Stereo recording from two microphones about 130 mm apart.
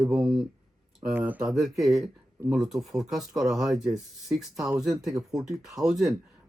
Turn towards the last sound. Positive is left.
turn(degrees=0)  # may be behind; listen again after turning